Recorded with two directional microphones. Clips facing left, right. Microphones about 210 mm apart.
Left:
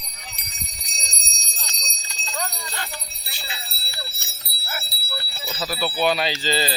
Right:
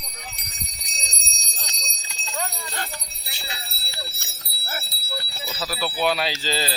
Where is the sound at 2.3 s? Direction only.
10° right (ahead or behind).